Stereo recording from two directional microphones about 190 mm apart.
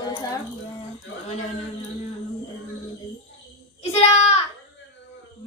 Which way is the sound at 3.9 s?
35° left (ahead or behind).